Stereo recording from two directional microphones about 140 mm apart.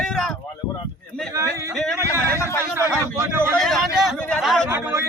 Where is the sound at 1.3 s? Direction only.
20° right (ahead or behind).